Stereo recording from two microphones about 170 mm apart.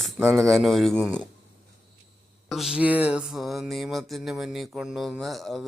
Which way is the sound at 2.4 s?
Centre (ahead or behind).